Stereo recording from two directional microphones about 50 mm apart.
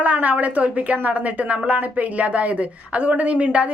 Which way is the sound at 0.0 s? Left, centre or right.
Right.